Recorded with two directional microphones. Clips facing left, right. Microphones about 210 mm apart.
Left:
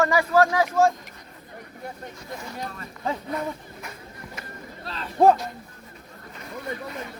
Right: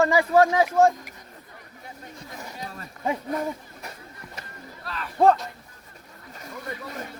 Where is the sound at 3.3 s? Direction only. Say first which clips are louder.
Right 1 dB; 35° right (ahead or behind).